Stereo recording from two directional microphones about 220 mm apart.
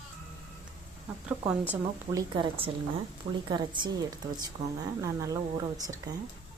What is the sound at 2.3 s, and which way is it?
A woman's voice, 20° right (ahead or behind).